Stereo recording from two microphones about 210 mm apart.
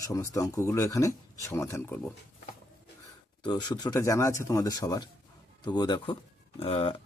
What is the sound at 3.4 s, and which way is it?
A man's voice, 20° left (ahead or behind).